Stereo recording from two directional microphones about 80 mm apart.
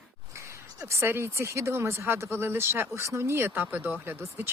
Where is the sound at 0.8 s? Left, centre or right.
Right.